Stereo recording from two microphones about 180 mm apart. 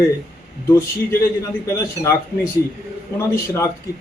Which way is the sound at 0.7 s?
15° left (ahead or behind).